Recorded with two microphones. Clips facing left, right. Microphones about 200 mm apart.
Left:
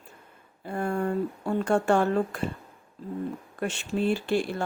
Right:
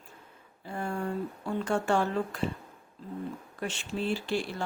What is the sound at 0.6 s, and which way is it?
Speech, 55° left (ahead or behind).